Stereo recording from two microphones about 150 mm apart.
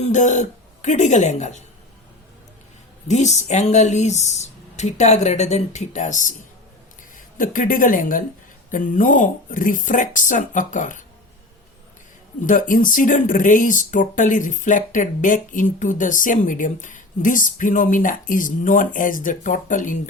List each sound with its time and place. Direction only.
0.0 s speech: 55° left (ahead or behind)
3.1 s speech: 50° left (ahead or behind)
7.3 s speech: 65° left (ahead or behind)
12.4 s speech: 60° left (ahead or behind)